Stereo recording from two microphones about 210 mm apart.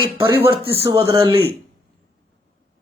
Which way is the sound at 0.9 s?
15° right (ahead or behind).